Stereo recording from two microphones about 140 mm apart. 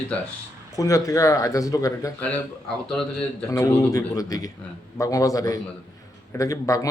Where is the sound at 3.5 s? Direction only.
25° left (ahead or behind).